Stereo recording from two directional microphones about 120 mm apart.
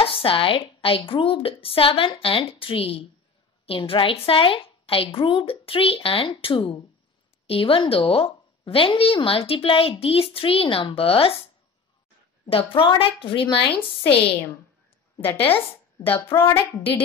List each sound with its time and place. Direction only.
0.0 s a woman's voice: 50° left (ahead or behind)
12.4 s a woman's voice: 50° left (ahead or behind)
16.1 s speech: 20° left (ahead or behind)